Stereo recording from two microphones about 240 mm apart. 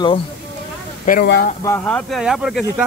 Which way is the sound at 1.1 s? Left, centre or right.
Left.